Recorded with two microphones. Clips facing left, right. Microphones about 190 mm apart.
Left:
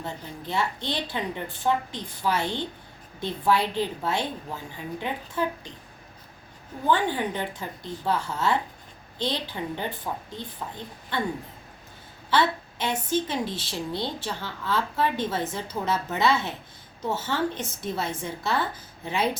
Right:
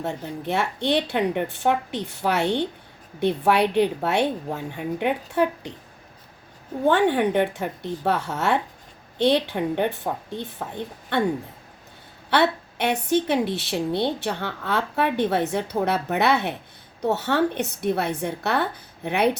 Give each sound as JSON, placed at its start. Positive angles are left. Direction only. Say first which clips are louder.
{"t": 0.0, "sound": "a woman's voice", "louder": "right 7 dB", "side_deg": -60}
{"t": 6.8, "sound": "a woman's voice", "louder": "right 6 dB", "side_deg": -65}
{"t": 12.3, "sound": "a woman's voice", "louder": "right 3 dB", "side_deg": -65}